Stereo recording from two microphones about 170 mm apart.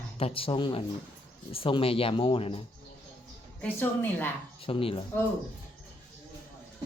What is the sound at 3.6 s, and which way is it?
Speech, 10° left (ahead or behind).